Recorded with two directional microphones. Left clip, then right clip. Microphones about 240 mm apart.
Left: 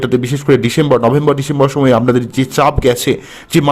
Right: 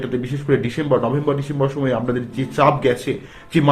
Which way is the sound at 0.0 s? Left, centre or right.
Left.